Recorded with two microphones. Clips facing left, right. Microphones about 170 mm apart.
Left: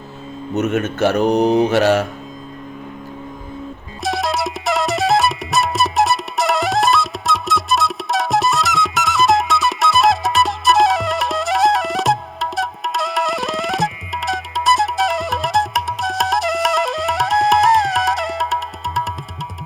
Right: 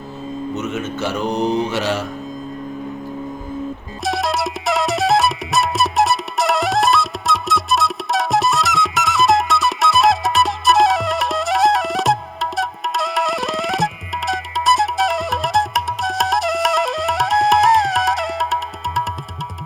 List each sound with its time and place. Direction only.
0.5 s mantra: 60° left (ahead or behind)
4.0 s music: centre (ahead or behind)